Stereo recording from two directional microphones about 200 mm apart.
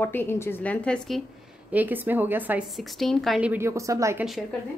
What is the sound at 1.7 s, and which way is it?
Speech, 10° right (ahead or behind).